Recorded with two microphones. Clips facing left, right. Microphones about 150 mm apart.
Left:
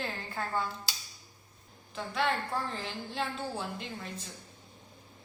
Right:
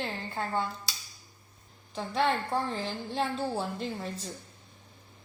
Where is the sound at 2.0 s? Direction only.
30° right (ahead or behind).